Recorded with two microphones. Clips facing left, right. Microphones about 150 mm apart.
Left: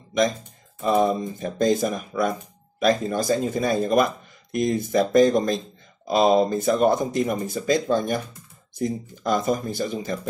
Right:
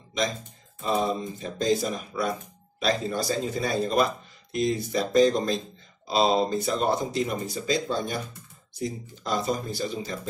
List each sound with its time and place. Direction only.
0.8 s speech: 50° left (ahead or behind)